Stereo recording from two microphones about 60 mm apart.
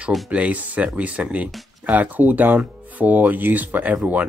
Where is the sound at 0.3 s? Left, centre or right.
Right.